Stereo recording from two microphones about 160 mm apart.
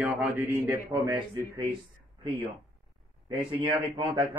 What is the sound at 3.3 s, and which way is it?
Speech, 30° right (ahead or behind).